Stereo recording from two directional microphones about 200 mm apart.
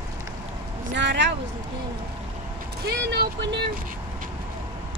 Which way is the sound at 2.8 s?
55° right (ahead or behind).